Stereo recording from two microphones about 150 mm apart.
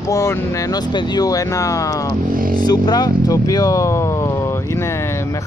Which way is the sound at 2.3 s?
70° right (ahead or behind).